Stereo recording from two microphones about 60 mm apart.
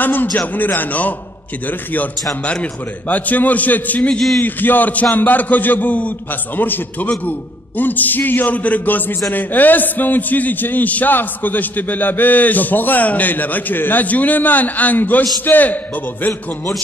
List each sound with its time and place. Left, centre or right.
0.0 s a man's voice: left